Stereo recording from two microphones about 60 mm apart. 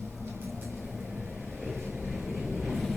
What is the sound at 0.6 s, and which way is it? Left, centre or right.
Vehicle, centre.